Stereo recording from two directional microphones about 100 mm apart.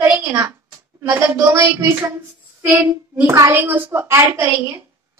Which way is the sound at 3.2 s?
30° right (ahead or behind).